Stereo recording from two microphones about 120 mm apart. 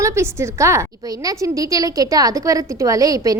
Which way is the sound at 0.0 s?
25° right (ahead or behind).